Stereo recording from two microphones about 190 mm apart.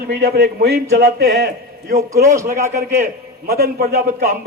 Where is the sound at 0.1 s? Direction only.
60° right (ahead or behind).